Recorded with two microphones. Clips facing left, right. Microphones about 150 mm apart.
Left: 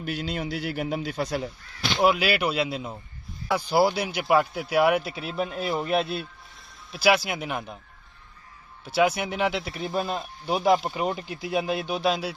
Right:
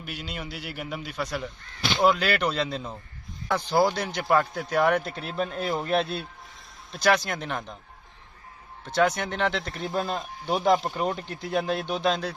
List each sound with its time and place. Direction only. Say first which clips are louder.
0.1 s a man's voice: left 7 dB; 35° left (ahead or behind)
1.6 s speech: even; 5° left (ahead or behind)
8.8 s speech: left 1 dB; 10° left (ahead or behind)